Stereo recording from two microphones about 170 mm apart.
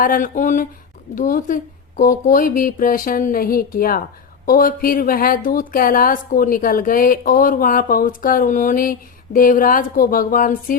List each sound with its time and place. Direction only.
0.0 s a woman's voice: 55° left (ahead or behind)